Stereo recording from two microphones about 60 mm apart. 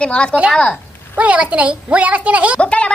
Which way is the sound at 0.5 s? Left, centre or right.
Centre.